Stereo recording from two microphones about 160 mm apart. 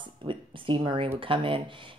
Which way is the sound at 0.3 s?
30° right (ahead or behind).